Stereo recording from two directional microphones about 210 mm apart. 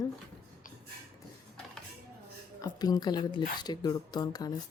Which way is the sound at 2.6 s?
20° left (ahead or behind).